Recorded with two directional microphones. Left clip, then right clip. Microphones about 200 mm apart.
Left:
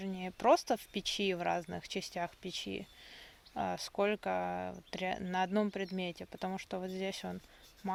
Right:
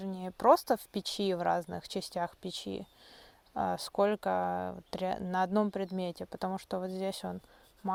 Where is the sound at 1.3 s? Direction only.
25° right (ahead or behind).